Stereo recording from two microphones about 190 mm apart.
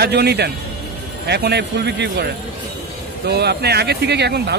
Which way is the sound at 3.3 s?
60° right (ahead or behind).